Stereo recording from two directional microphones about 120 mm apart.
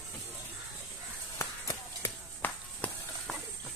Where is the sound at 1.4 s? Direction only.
25° left (ahead or behind).